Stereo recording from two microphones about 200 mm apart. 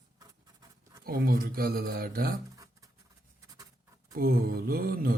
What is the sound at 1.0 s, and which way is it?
Speech, 50° right (ahead or behind).